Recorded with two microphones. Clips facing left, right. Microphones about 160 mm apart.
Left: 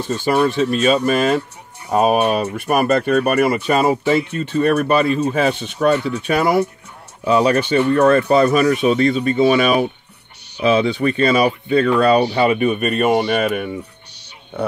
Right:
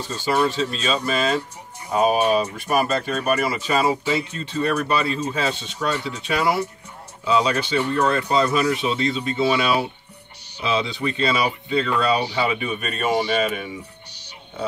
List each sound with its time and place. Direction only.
0.1 s speech: 60° left (ahead or behind)